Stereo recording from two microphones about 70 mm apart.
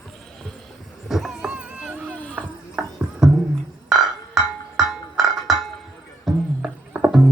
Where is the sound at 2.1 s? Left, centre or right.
Centre.